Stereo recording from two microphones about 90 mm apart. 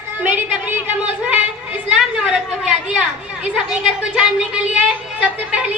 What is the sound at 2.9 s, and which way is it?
A woman's voice, 10° right (ahead or behind).